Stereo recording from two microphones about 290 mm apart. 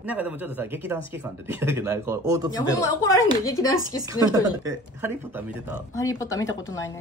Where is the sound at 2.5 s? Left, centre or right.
Centre.